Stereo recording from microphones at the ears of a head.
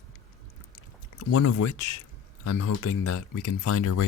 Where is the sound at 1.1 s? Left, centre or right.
Left.